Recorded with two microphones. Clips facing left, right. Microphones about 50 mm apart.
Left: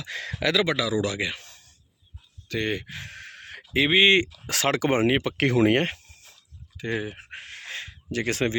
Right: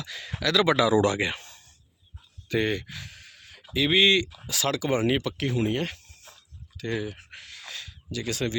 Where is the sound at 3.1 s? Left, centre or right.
Left.